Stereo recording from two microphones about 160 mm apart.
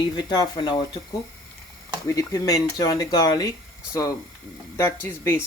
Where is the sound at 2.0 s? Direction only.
20° left (ahead or behind).